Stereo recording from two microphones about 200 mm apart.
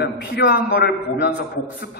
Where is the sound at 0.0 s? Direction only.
55° left (ahead or behind).